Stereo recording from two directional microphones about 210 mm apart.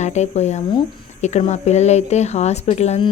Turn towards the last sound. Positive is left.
turn(degrees=30)  # may be behind; listen again after turning